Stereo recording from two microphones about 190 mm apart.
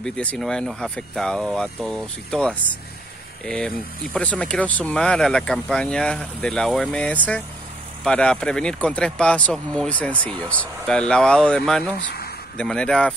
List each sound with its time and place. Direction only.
0.0 s speech: 5° left (ahead or behind)
12.0 s a sound: 55° left (ahead or behind)
12.5 s speech: 5° left (ahead or behind)